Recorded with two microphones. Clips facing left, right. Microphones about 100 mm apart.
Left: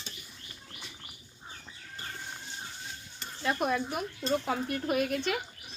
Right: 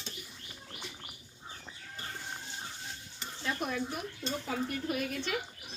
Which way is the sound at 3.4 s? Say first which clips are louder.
Left 5 dB; 65° left (ahead or behind).